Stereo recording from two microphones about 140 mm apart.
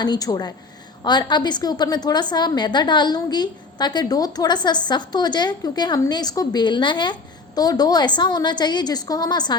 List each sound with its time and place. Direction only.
0.0 s a woman's voice: 30° left (ahead or behind)